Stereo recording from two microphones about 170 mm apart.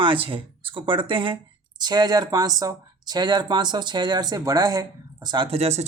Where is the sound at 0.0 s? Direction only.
30° right (ahead or behind).